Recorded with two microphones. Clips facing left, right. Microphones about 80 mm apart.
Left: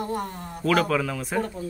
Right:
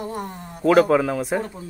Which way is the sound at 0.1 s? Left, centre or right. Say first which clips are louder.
Left 1 dB; centre.